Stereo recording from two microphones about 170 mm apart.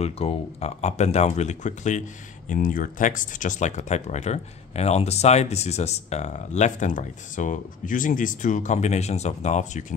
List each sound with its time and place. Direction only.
0.0 s speech: 35° left (ahead or behind)